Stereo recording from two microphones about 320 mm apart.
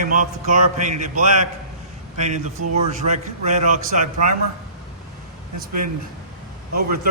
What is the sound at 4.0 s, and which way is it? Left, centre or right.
Speech, right.